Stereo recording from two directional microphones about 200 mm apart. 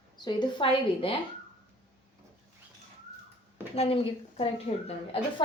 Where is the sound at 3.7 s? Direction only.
30° left (ahead or behind).